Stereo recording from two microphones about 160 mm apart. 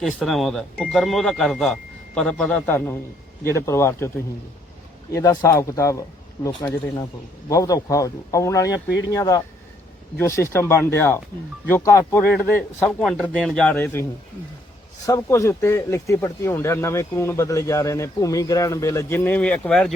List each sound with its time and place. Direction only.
0.0 s speech: centre (ahead or behind); by 4.1 s 15° left (ahead or behind)
5.1 s speech: 20° left (ahead or behind)
12.8 s speech: centre (ahead or behind)
15.0 s speech: 20° left (ahead or behind)